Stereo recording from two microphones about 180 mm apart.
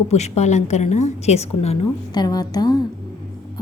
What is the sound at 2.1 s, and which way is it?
Speech, 20° left (ahead or behind).